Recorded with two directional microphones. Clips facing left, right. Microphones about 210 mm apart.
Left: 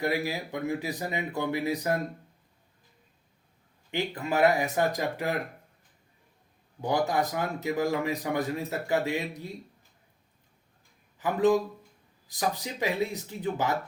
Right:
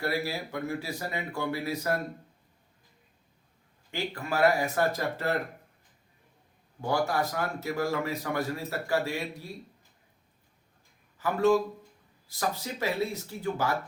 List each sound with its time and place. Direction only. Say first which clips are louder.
0.0 s speech: left 2 dB; 15° left (ahead or behind)
3.9 s speech: left 3 dB; 20° left (ahead or behind)
6.8 s a man's voice: left 1 dB; 20° left (ahead or behind)
11.2 s speech: even; 15° left (ahead or behind)